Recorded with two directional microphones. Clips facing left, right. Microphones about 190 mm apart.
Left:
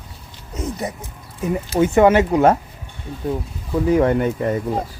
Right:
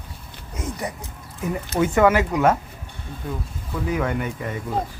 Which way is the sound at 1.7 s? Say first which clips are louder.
Left 4 dB; 25° left (ahead or behind).